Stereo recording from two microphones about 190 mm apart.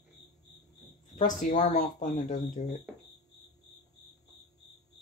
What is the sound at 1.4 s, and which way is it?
Speech, 45° left (ahead or behind).